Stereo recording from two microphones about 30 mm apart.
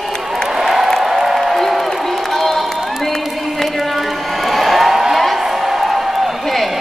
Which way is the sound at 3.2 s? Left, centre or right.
Centre.